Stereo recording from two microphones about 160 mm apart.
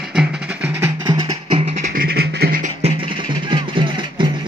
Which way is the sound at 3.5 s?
30° right (ahead or behind).